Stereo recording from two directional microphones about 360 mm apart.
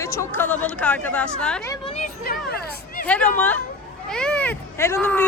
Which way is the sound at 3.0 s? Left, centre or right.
Left.